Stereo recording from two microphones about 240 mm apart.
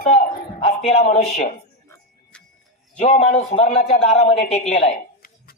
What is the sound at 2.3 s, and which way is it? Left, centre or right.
Music, centre.